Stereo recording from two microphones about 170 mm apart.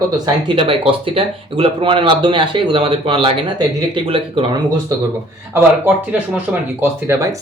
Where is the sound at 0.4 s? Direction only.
30° right (ahead or behind).